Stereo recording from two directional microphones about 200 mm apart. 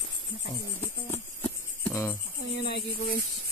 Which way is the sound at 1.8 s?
10° left (ahead or behind).